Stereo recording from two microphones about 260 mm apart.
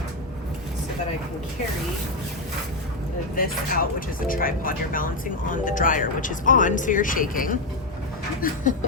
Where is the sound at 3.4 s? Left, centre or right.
Left.